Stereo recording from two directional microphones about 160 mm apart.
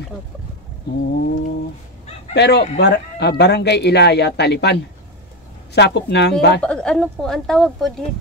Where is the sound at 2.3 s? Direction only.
90° left.